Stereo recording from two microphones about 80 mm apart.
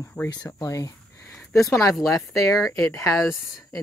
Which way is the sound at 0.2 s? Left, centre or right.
Centre.